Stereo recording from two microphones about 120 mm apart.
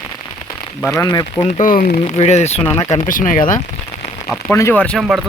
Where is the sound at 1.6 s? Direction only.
90° left.